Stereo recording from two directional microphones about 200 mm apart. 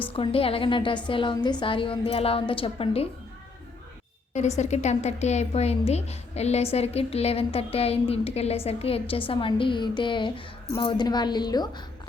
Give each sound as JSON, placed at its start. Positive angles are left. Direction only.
{"t": 0.1, "sound": "a woman's voice", "side_deg": 30}
{"t": 4.4, "sound": "a woman's voice", "side_deg": 35}